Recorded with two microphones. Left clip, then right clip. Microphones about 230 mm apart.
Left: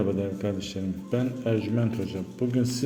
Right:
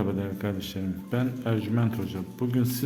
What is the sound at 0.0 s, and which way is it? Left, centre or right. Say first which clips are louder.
A man's voice: left 3 dB; centre.